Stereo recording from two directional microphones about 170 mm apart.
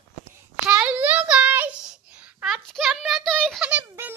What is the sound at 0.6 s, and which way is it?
Child singing, 5° right (ahead or behind).